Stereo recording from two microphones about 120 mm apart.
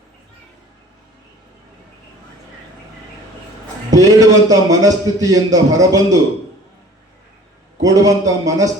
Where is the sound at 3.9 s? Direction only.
30° right (ahead or behind).